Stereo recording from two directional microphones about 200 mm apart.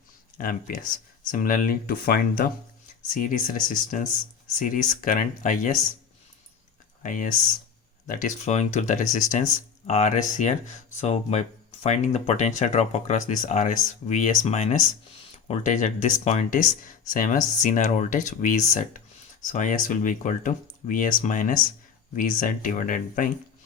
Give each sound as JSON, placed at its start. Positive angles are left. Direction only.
{"t": 0.3, "sound": "speech", "side_deg": 45}
{"t": 7.0, "sound": "speech", "side_deg": 40}